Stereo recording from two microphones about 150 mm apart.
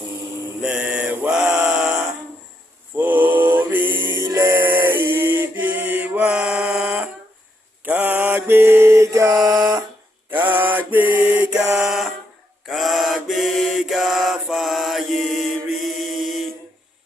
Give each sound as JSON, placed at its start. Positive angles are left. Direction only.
{"t": 0.6, "sound": "a sound", "side_deg": -5}
{"t": 2.9, "sound": "mantra", "side_deg": -10}
{"t": 4.1, "sound": "music", "side_deg": -20}
{"t": 7.9, "sound": "mantra", "side_deg": -10}
{"t": 10.2, "sound": "mantra", "side_deg": -15}